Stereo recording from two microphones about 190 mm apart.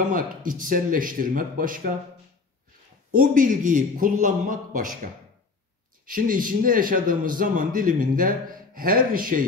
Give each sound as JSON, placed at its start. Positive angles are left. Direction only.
{"t": 0.1, "sound": "speech", "side_deg": -45}
{"t": 3.1, "sound": "speech", "side_deg": -45}